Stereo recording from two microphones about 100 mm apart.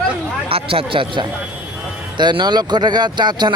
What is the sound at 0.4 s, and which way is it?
Speech, 70° right (ahead or behind).